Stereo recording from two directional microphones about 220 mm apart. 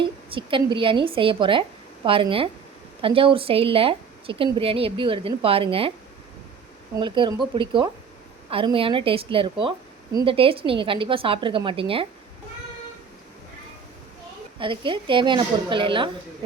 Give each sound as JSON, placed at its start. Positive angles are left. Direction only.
{"t": 0.0, "sound": "a woman's voice", "side_deg": -20}
{"t": 6.9, "sound": "a woman's voice", "side_deg": -20}
{"t": 14.6, "sound": "a woman's voice", "side_deg": -25}